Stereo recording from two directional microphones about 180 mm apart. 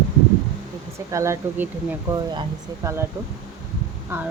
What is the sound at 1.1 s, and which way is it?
Speech, 15° right (ahead or behind).